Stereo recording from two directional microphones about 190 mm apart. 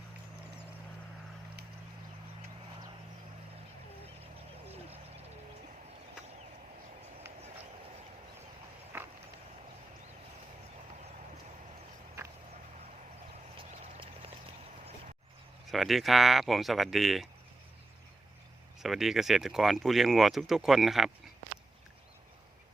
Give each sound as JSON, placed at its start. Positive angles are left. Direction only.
{"t": 8.9, "sound": "clip-clop", "side_deg": -10}
{"t": 13.6, "sound": "clip-clop", "side_deg": -30}
{"t": 15.7, "sound": "speech", "side_deg": 0}
{"t": 18.8, "sound": "speech", "side_deg": 0}